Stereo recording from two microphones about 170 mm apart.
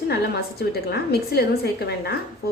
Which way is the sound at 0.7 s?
65° left (ahead or behind).